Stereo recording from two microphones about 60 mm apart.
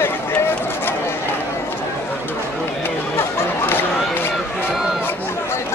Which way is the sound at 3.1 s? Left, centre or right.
Left.